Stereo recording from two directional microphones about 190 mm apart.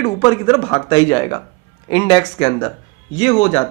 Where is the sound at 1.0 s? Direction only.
15° left (ahead or behind); by 3.7 s 35° left (ahead or behind).